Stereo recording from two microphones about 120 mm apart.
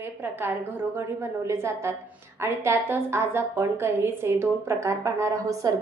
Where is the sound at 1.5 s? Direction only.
25° right (ahead or behind).